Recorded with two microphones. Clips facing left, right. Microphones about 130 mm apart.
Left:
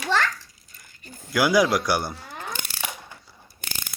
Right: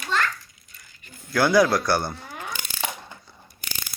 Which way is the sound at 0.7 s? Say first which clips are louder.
Left 3 dB; 40° left (ahead or behind).